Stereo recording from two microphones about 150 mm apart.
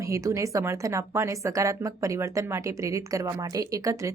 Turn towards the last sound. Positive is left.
turn(degrees=-20)  # may be behind; listen again after turning